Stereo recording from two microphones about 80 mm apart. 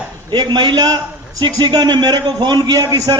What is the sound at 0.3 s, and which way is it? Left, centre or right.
A man's voice, right.